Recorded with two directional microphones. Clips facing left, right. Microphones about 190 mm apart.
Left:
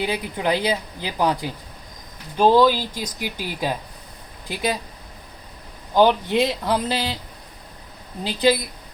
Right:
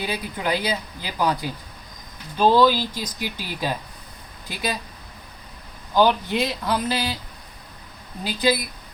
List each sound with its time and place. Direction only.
0.0 s speech: 20° left (ahead or behind)
5.9 s speech: 20° left (ahead or behind)
8.2 s speech: 25° left (ahead or behind)